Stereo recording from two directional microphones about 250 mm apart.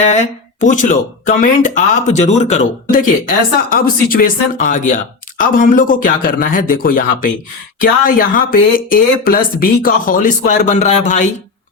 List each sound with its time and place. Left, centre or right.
0.6 s speech: left